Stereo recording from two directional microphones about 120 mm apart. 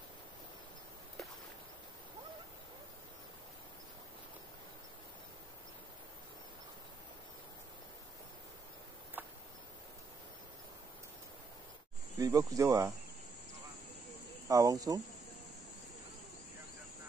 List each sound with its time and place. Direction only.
9.2 s a sound: 15° right (ahead or behind)
12.2 s speech: 30° right (ahead or behind)
14.5 s speech: 30° right (ahead or behind)